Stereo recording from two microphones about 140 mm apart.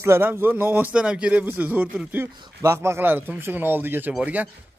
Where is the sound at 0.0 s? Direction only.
15° right (ahead or behind).